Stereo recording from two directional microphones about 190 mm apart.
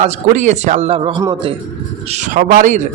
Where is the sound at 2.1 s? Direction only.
45° right (ahead or behind).